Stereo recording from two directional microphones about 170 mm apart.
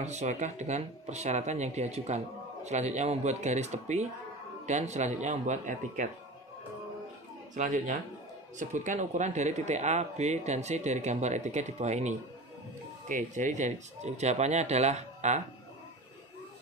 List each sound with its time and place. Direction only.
0.0 s speech: 40° right (ahead or behind)
7.5 s speech: 45° right (ahead or behind)